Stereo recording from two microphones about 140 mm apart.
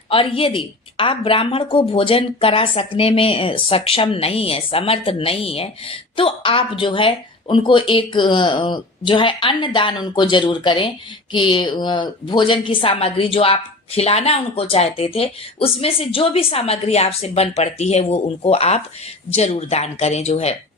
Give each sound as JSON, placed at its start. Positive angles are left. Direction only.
{"t": 0.1, "sound": "a woman's voice", "side_deg": 40}